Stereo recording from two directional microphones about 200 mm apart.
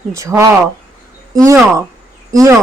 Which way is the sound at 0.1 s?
15° right (ahead or behind).